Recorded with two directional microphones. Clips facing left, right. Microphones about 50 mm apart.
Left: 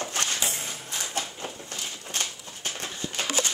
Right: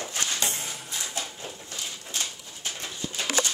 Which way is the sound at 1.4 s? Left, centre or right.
Left.